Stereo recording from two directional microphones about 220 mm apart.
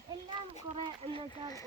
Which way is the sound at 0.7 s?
25° right (ahead or behind).